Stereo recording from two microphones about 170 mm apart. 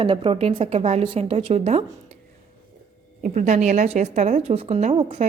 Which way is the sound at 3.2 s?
45° right (ahead or behind).